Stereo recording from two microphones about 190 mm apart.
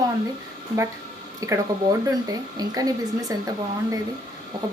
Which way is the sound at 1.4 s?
15° right (ahead or behind).